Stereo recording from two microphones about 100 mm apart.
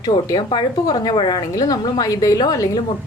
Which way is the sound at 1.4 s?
40° left (ahead or behind).